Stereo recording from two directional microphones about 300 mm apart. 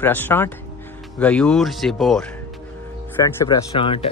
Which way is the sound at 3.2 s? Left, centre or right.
Centre.